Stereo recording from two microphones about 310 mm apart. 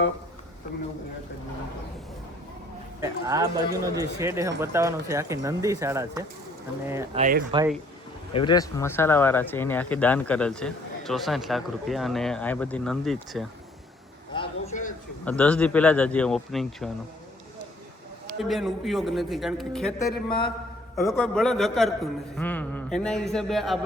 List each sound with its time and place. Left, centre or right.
3.0 s speech: centre
7.2 s speech: right
8.3 s speech: centre
14.3 s a man's voice: centre
15.2 s speech: centre
18.3 s speech: centre
20.2 s a man's voice: centre
20.9 s speech: centre